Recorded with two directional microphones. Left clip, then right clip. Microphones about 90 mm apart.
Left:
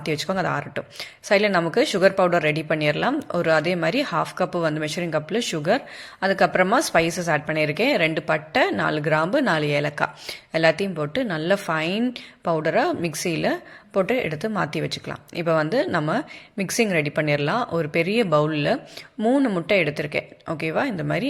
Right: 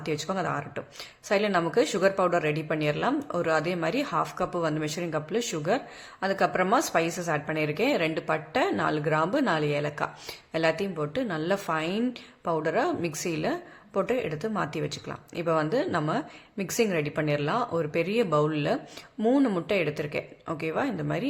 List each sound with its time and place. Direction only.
0.0 s speech: 35° left (ahead or behind)
19.2 s speech: 10° left (ahead or behind)
19.6 s speech: 30° left (ahead or behind)